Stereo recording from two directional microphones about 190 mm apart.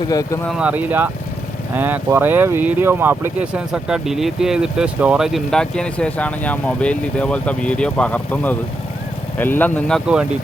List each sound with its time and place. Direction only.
0.1 s speech: 20° left (ahead or behind)
0.4 s speech: 5° right (ahead or behind)